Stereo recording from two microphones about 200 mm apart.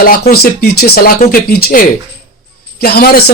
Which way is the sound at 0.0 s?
45° left (ahead or behind).